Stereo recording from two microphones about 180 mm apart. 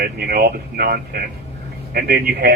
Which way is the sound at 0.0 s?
60° right (ahead or behind).